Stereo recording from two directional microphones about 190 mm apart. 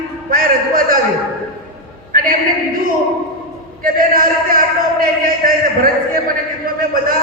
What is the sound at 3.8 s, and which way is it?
A man's voice, 45° right (ahead or behind).